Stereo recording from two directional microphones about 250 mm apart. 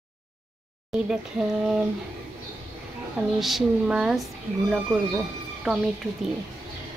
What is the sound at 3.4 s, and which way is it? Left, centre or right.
Speech, centre.